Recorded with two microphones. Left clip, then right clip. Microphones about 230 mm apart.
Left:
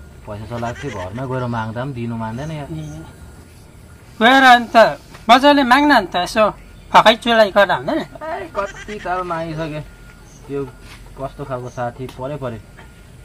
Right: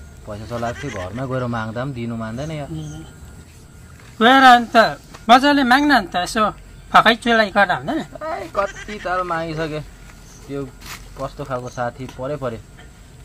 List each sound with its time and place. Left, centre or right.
0.3 s speech: centre
4.2 s a man's voice: right
8.2 s speech: centre
11.1 s speech: centre